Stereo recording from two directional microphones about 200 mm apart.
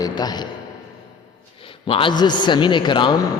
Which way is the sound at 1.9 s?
25° left (ahead or behind).